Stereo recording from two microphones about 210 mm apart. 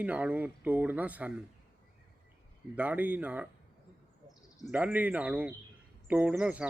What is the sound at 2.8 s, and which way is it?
Speech, 5° right (ahead or behind).